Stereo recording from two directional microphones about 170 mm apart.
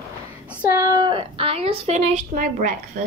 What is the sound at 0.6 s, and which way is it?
A woman's voice, 15° right (ahead or behind).